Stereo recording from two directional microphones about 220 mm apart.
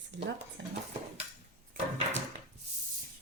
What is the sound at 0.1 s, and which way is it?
Speech, 50° right (ahead or behind).